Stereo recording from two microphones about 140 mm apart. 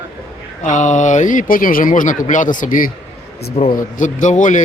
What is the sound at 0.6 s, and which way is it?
Speech, 65° left (ahead or behind).